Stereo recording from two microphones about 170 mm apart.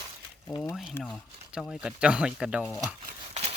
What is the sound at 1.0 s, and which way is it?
Speech, centre (ahead or behind).